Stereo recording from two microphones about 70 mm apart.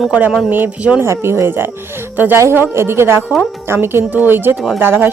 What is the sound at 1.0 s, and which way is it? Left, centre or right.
A woman's voice, right.